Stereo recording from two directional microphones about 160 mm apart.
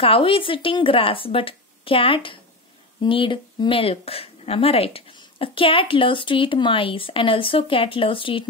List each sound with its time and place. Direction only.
0.0 s a woman's voice: 35° left (ahead or behind)